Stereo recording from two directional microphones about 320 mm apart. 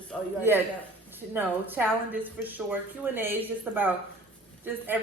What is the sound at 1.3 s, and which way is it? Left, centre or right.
A woman's voice, centre.